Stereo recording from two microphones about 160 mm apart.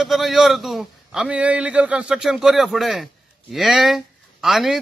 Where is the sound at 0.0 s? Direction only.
Centre (ahead or behind).